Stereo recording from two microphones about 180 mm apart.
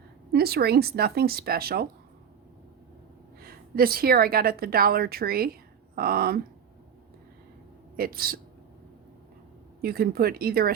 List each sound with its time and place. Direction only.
0.3 s a woman's voice: 60° right (ahead or behind)
3.4 s a woman's voice: 55° right (ahead or behind)
7.9 s a woman's voice: 55° right (ahead or behind)
9.8 s a woman's voice: 55° right (ahead or behind)